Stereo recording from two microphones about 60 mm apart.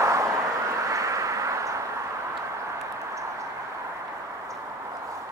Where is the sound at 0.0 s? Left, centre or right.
Right.